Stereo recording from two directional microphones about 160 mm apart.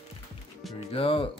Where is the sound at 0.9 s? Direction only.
35° left (ahead or behind).